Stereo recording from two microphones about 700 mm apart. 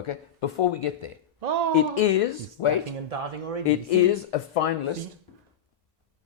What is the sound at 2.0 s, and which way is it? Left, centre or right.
Speech, left.